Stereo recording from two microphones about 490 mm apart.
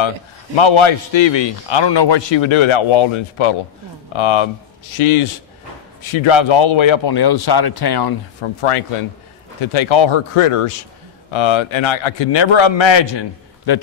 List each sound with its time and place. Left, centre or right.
0.6 s a man's voice: left
6.1 s speech: left
8.4 s speech: left
9.6 s a man's voice: left
11.3 s a man's voice: left